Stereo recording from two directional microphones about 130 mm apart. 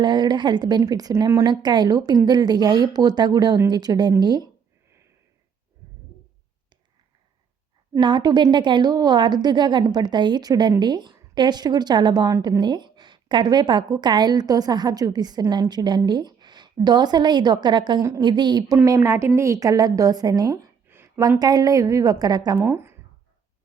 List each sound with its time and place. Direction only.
0.0 s a woman's voice: 35° right (ahead or behind)
1.5 s a woman's voice: 35° right (ahead or behind)
7.9 s a woman's voice: 35° right (ahead or behind)
18.8 s a woman's voice: 25° right (ahead or behind)
20.8 s a woman's voice: 15° right (ahead or behind)
22.5 s speech: 15° right (ahead or behind)